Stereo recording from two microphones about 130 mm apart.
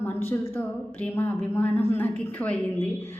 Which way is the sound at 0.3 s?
15° left (ahead or behind).